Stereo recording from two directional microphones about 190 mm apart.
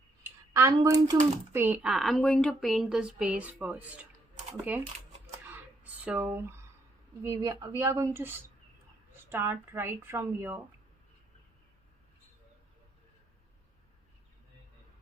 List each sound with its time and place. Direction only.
0.2 s speech: 15° right (ahead or behind)
5.5 s a sound: 10° right (ahead or behind)
7.3 s speech: 20° right (ahead or behind)